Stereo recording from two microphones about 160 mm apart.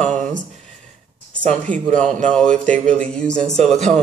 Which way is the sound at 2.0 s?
50° right (ahead or behind).